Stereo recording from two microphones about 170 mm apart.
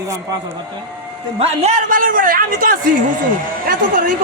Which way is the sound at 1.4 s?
45° right (ahead or behind).